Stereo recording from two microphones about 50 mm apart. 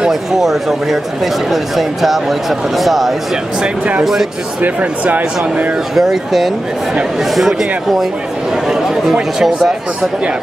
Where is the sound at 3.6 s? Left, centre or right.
Right.